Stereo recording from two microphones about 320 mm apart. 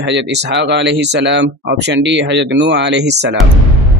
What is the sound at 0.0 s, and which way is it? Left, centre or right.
Speech, right.